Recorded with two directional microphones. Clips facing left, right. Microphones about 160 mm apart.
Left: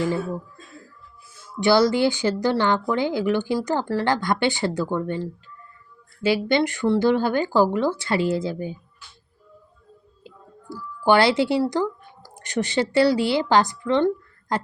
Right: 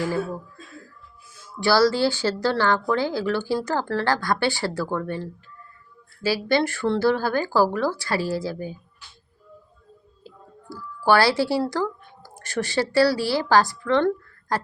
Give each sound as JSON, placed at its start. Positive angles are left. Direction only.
{"t": 1.5, "sound": "speech", "side_deg": 20}
{"t": 10.2, "sound": "speech", "side_deg": 20}